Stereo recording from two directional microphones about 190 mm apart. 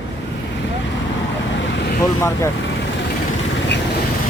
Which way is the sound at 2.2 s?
15° left (ahead or behind).